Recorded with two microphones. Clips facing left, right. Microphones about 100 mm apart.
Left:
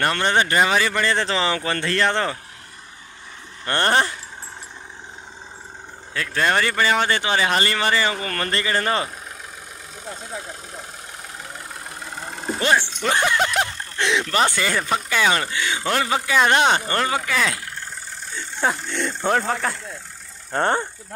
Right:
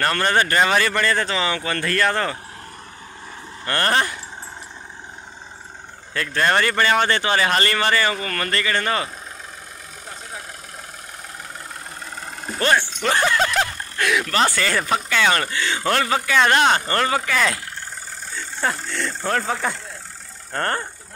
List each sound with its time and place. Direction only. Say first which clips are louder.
0.0 s speech: even; 15° left (ahead or behind)
1.0 s speech: even; 30° left (ahead or behind)
3.6 s speech: left 1 dB; 25° left (ahead or behind)
6.1 s speech: right 1 dB; 5° left (ahead or behind); by 9.1 s 25° left (ahead or behind)
12.4 s vehicle: even; 15° left (ahead or behind)
13.1 s a sound: right 1 dB; 15° left (ahead or behind)
15.0 s speech: right 1 dB; 10° left (ahead or behind)
18.6 s speech: left 2 dB; 5° left (ahead or behind)
19.4 s speech: even; centre (ahead or behind)
20.5 s speech: left 4 dB; 15° left (ahead or behind)